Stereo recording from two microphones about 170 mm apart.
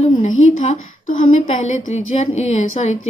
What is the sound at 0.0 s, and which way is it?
A woman's voice, 40° left (ahead or behind).